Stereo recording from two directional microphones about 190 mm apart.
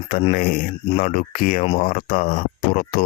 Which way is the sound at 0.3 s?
50° left (ahead or behind).